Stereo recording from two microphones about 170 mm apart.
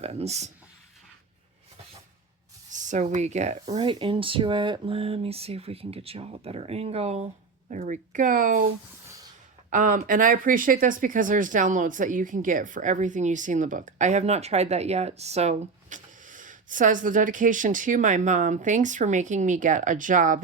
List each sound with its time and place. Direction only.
0.0 s speech: 35° right (ahead or behind)
2.6 s speech: 45° right (ahead or behind)
3.8 s speech: 30° right (ahead or behind)
7.7 s speech: 50° right (ahead or behind)